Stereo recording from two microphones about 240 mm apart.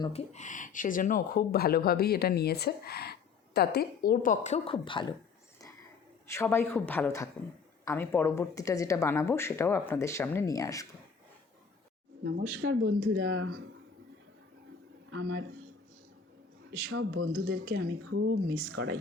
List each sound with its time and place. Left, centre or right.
0.0 s speech: left
6.2 s a woman's voice: centre
12.4 s speech: right
12.7 s speech: right
15.1 s a man's voice: right
16.9 s speech: right